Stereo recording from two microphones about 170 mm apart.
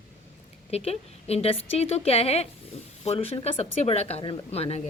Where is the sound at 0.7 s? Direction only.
35° left (ahead or behind).